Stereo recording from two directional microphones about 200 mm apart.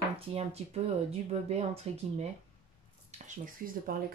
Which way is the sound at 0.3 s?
30° right (ahead or behind).